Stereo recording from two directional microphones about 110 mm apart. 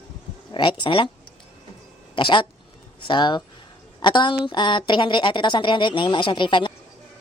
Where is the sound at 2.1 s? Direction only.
50° left (ahead or behind).